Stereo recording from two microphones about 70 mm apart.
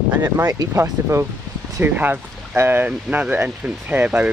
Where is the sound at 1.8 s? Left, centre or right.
Right.